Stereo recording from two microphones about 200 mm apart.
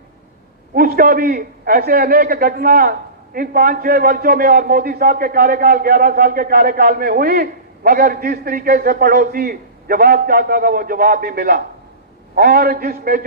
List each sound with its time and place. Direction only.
0.7 s a man's voice: 45° right (ahead or behind)